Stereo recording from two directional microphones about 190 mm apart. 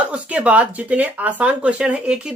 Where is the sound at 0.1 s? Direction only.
5° right (ahead or behind).